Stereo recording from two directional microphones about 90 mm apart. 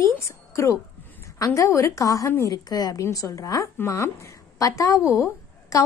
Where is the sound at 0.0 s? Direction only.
35° left (ahead or behind).